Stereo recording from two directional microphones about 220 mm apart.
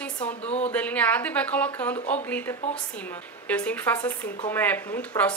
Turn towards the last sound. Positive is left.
turn(degrees=5)  # may be behind; listen again after turning